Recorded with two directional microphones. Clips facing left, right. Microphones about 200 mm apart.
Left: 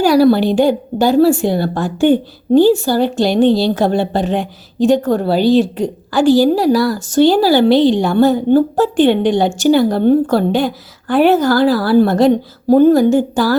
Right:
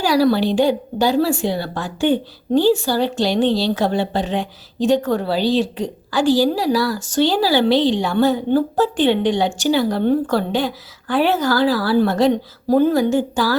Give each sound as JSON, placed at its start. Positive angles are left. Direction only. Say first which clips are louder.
{"t": 0.0, "sound": "a woman's voice", "louder": "left 6 dB", "side_deg": 50}